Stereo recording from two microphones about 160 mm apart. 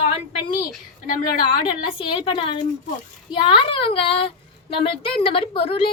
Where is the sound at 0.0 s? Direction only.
35° left (ahead or behind).